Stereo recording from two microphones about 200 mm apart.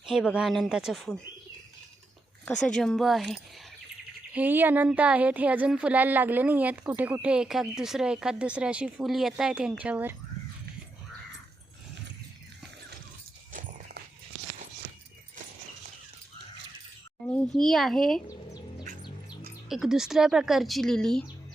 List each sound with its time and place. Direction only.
0.0 s speech: 5° right (ahead or behind)
2.4 s speech: 5° left (ahead or behind)
4.4 s speech: 10° right (ahead or behind)
13.5 s a sound: 40° right (ahead or behind)
17.2 s speech: 5° left (ahead or behind)
18.3 s bird: 20° left (ahead or behind)
19.6 s speech: centre (ahead or behind)